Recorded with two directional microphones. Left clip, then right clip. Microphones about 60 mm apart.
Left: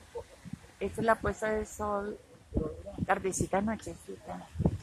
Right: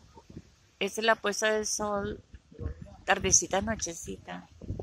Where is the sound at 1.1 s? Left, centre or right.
Right.